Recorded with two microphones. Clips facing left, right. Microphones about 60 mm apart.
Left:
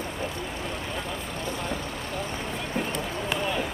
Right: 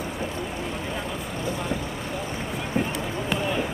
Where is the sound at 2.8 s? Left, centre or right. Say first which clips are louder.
Right 4 dB; centre.